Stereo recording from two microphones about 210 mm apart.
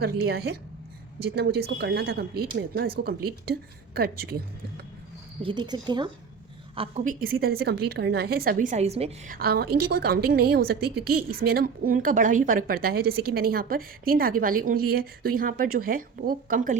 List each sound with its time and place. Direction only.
0.0 s a woman's voice: 50° right (ahead or behind)
5.4 s speech: 25° right (ahead or behind)
6.7 s a woman's voice: 35° right (ahead or behind)
9.3 s a woman's voice: 45° right (ahead or behind)